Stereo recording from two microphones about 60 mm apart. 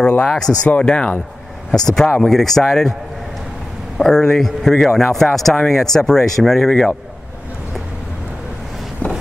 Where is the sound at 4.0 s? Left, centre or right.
Centre.